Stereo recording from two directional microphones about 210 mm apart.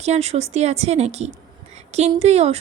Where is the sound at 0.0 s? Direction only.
30° right (ahead or behind).